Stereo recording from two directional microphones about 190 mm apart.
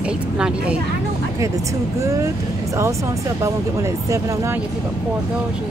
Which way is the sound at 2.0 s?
15° right (ahead or behind).